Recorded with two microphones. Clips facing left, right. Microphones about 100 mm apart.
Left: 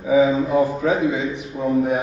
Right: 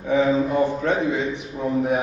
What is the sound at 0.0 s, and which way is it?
A man's voice, 5° left (ahead or behind).